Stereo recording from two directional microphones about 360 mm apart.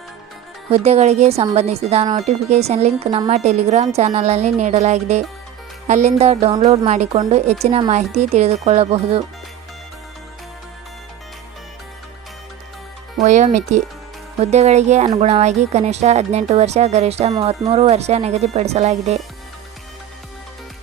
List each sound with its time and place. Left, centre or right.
0.7 s speech: centre
13.2 s speech: centre